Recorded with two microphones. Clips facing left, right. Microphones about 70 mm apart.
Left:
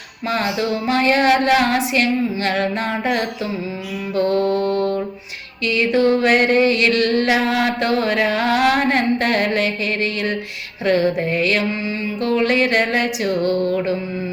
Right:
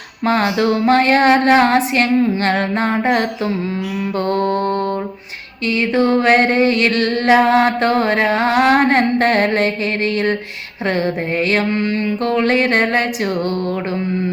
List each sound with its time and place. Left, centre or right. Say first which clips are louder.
0.3 s mantra: right 5 dB; right
11.7 s mantra: right 5 dB; right
12.2 s mantra: even; right